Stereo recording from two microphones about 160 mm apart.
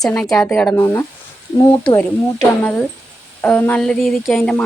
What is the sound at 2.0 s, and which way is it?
Speech, 10° left (ahead or behind).